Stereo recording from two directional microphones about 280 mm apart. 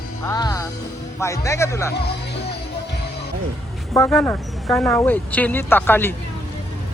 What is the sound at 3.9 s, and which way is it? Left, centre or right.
A woman's voice, centre.